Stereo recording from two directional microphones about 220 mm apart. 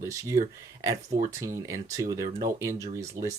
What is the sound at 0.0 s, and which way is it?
Speech, 15° right (ahead or behind).